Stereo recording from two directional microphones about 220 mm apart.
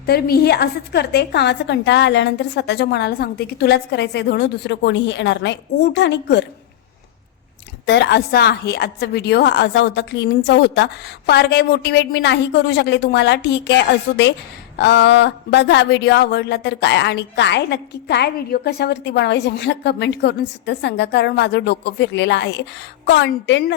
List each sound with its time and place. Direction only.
0.0 s speech: 45° left (ahead or behind)
7.9 s speech: 50° left (ahead or behind)